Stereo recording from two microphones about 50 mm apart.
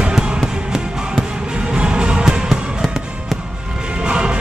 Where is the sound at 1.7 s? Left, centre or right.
Centre.